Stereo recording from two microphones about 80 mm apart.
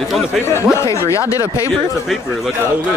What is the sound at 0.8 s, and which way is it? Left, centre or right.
Speech, left.